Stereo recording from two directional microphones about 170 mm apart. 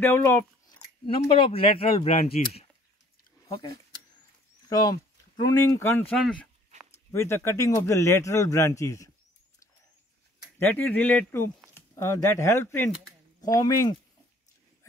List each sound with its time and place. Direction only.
0.0 s speech: 15° left (ahead or behind)
1.0 s speech: 30° left (ahead or behind)
4.6 s speech: 20° left (ahead or behind)
6.1 s speech: 5° left (ahead or behind)
7.1 s speech: 15° left (ahead or behind)
10.6 s speech: 10° left (ahead or behind)